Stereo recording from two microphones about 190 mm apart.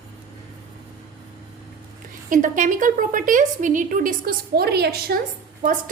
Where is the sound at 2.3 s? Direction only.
45° right (ahead or behind); by 5.0 s 60° right (ahead or behind).